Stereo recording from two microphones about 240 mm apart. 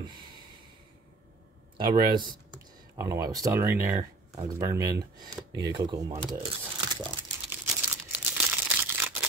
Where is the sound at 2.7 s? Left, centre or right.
Centre.